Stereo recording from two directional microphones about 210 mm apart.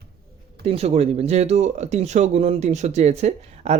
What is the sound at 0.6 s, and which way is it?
Speech, 30° right (ahead or behind).